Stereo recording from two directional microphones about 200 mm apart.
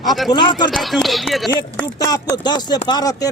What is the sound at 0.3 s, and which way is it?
Speech, 25° left (ahead or behind).